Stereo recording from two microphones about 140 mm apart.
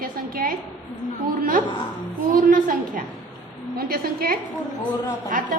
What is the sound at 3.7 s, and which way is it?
Speech, 90° right.